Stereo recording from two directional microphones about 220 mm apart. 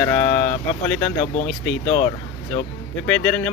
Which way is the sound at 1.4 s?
5° left (ahead or behind).